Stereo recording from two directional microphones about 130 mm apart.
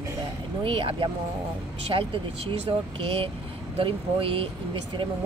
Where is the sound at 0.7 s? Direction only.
45° right (ahead or behind).